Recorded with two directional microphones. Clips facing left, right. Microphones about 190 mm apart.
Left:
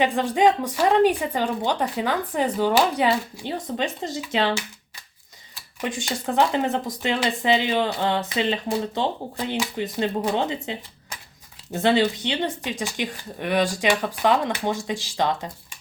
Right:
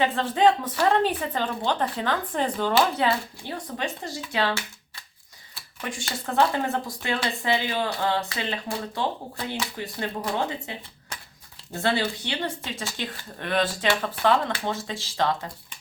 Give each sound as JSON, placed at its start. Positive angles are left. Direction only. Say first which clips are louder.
{"t": 0.0, "sound": "a woman's voice", "louder": "left 2 dB", "side_deg": 15}
{"t": 5.8, "sound": "a woman's voice", "louder": "left 5 dB", "side_deg": 20}